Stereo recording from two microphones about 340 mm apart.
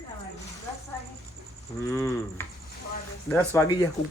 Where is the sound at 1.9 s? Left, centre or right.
Centre.